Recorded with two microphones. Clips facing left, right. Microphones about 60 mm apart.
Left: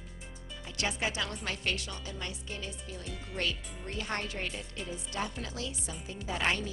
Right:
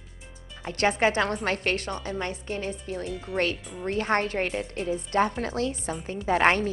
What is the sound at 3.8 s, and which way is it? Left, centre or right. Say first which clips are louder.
Speech: right 11 dB; right.